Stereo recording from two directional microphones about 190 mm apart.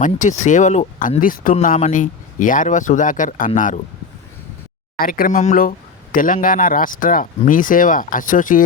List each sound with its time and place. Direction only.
0.0 s speech: 40° left (ahead or behind)
4.9 s speech: 50° left (ahead or behind)